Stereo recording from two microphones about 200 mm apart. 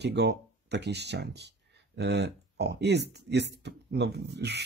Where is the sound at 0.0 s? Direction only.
55° right (ahead or behind).